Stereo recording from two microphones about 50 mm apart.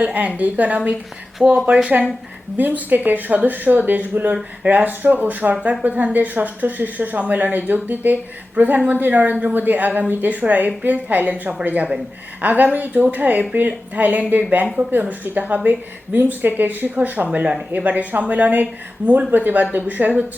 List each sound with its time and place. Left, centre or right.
0.0 s speech: right